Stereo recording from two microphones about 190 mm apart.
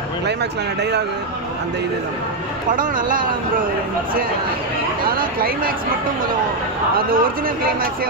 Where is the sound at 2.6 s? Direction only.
45° right (ahead or behind).